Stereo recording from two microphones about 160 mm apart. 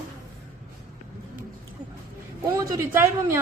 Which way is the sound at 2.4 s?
20° right (ahead or behind).